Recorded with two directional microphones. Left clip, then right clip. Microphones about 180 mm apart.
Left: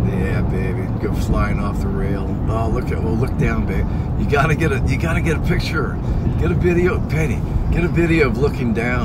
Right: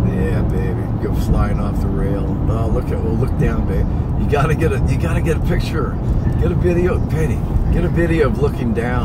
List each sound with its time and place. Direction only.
4.3 s speech: 15° left (ahead or behind)
6.4 s speech: 15° left (ahead or behind)